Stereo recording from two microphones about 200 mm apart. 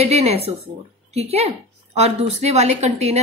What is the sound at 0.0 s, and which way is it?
A woman's voice, 30° right (ahead or behind).